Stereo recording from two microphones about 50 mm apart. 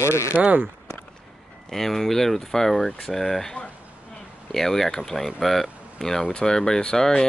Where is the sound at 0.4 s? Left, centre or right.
Right.